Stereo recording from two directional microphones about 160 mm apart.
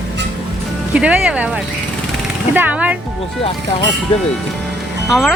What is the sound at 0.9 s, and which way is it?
Speech, 5° right (ahead or behind).